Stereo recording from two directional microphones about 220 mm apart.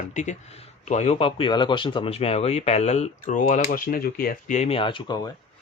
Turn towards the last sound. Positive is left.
turn(degrees=20)  # may be behind; listen again after turning